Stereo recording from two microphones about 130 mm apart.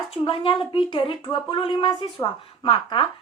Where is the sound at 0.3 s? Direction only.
45° left (ahead or behind).